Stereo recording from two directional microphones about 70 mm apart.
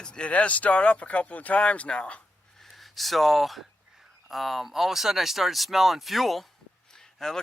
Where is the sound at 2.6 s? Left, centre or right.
Centre.